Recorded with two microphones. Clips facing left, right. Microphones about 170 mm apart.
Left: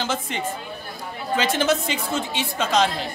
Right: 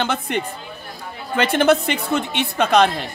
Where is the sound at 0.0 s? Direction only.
60° right (ahead or behind).